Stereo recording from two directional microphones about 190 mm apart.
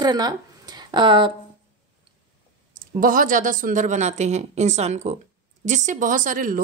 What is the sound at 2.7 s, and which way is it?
Speech, 45° right (ahead or behind).